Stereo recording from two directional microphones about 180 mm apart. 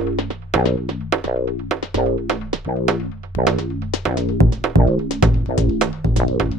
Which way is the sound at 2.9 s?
Centre (ahead or behind).